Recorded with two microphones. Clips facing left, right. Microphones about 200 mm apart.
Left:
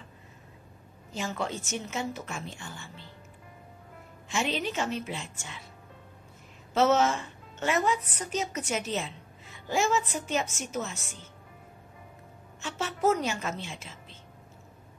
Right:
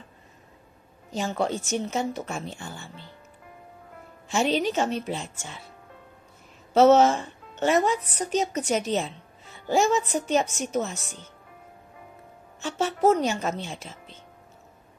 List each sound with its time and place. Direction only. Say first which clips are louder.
1.1 s a woman's voice: right 6 dB; 35° right (ahead or behind)
4.3 s a woman's voice: right 7 dB; 40° right (ahead or behind)
6.7 s a woman's voice: right 7 dB; 35° right (ahead or behind)
12.5 s a woman's voice: right 7 dB; 35° right (ahead or behind)